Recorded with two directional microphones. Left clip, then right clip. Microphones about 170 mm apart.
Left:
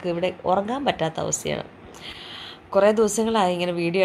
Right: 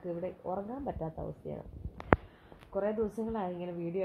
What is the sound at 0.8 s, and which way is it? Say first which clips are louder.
Speech: left 15 dB; 65° left (ahead or behind).